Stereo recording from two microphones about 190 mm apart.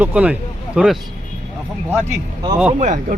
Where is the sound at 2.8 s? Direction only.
40° right (ahead or behind).